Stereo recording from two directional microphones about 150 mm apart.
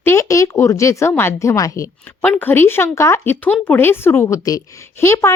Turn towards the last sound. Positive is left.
turn(degrees=20)  # may be behind; listen again after turning